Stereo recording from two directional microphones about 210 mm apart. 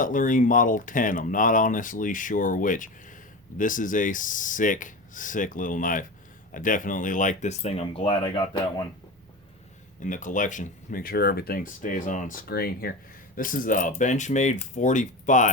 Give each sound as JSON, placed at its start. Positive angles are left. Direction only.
{"t": 0.0, "sound": "speech", "side_deg": 40}
{"t": 10.0, "sound": "speech", "side_deg": 40}